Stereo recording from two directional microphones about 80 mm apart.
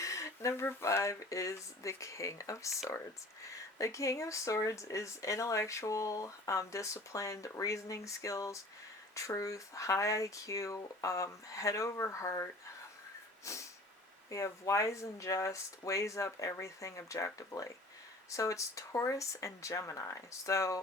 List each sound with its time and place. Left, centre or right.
0.0 s a sound: left
0.6 s speech: left
0.9 s speech: left
13.4 s snort: left
14.3 s speech: left